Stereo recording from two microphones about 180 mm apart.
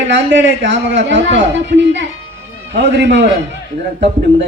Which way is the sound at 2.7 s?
75° right (ahead or behind).